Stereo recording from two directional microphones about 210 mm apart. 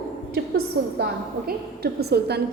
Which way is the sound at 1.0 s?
50° right (ahead or behind).